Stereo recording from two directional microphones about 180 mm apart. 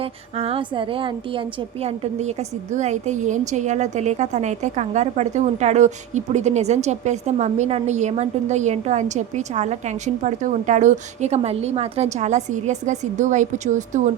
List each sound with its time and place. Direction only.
0.0 s a woman's voice: 30° right (ahead or behind)